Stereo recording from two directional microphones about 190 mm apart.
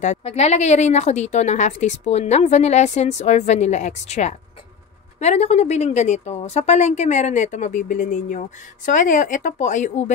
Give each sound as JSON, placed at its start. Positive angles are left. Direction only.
{"t": 0.0, "sound": "a woman's voice", "side_deg": 35}